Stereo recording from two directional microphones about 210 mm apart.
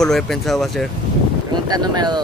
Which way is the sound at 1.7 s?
20° right (ahead or behind).